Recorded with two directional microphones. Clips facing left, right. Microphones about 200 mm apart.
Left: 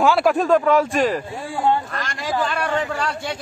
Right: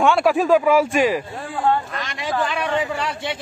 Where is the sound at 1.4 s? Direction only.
20° left (ahead or behind).